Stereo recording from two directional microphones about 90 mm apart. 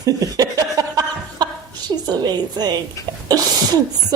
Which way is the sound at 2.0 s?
50° right (ahead or behind).